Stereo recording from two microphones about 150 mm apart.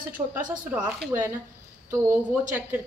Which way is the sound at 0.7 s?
5° right (ahead or behind).